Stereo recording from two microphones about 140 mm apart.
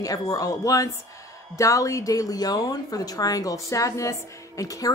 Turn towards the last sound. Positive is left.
turn(degrees=25)  # may be behind; listen again after turning